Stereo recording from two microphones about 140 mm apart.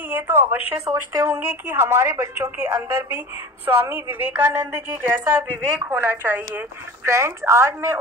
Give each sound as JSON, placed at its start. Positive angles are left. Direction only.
{"t": 0.1, "sound": "a woman's voice", "side_deg": -15}